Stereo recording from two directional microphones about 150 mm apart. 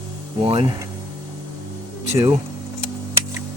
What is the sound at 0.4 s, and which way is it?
Speech, 35° right (ahead or behind).